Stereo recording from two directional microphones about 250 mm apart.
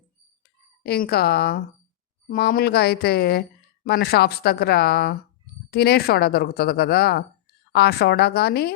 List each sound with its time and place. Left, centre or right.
0.8 s a woman's voice: left